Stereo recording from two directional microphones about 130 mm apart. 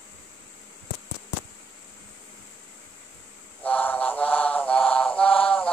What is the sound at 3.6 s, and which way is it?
Mantra, 10° left (ahead or behind).